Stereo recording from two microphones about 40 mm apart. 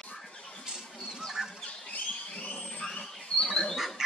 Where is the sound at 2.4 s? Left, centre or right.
Left.